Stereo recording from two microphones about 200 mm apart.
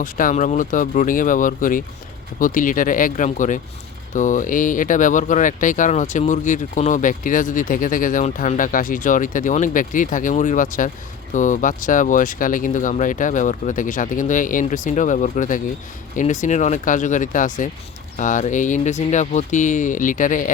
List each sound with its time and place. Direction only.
0.0 s speech: 40° left (ahead or behind)